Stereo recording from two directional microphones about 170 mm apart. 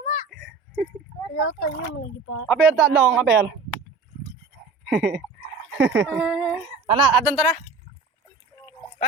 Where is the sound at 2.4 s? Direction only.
Centre (ahead or behind).